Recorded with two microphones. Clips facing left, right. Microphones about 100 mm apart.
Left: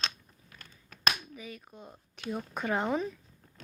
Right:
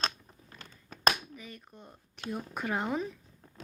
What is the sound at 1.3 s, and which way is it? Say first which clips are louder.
Speech: left 3 dB; 5° left (ahead or behind).